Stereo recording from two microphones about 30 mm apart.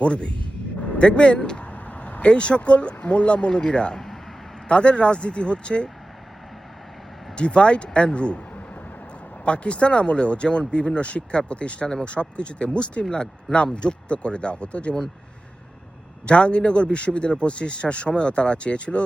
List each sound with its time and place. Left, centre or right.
0.0 s a man's voice: left
1.5 s a man's voice: left
3.9 s a sound: centre
4.7 s a man's voice: left
7.3 s a man's voice: left
9.4 s a man's voice: left
16.2 s a man's voice: left